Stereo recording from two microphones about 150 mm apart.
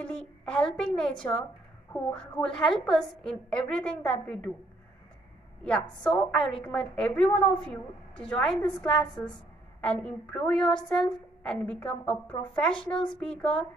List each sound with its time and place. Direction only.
0.0 s a woman's voice: 5° left (ahead or behind)
1.9 s a woman's voice: 15° left (ahead or behind)
2.1 s a woman's voice: 5° left (ahead or behind)
5.6 s a woman's voice: 5° left (ahead or behind)